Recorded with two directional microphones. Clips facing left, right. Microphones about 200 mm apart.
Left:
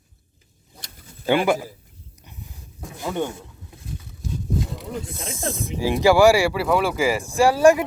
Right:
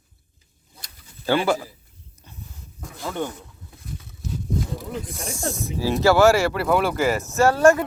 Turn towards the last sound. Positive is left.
turn(degrees=15)  # may be behind; listen again after turning